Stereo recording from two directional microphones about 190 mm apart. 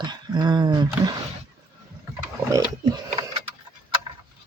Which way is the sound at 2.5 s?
20° right (ahead or behind).